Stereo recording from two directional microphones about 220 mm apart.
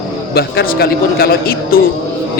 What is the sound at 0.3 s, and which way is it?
A man's voice, 45° left (ahead or behind).